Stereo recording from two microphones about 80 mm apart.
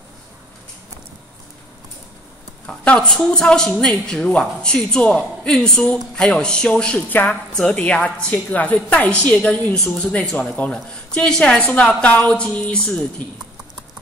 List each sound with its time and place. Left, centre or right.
2.6 s a woman's voice: centre
9.9 s a woman's voice: centre